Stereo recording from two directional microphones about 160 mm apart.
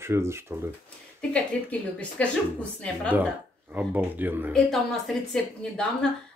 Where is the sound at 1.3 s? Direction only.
10° left (ahead or behind).